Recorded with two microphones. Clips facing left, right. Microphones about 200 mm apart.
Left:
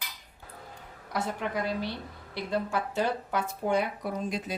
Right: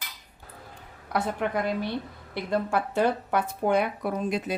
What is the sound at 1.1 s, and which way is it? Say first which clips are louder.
Speech: right 4 dB; 55° right (ahead or behind).